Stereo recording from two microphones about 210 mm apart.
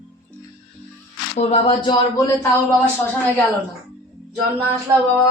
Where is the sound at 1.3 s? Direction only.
30° left (ahead or behind).